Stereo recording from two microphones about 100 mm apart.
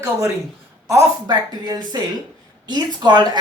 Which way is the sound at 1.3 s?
45° right (ahead or behind).